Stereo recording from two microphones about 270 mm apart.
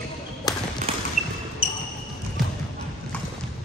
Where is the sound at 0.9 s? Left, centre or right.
Right.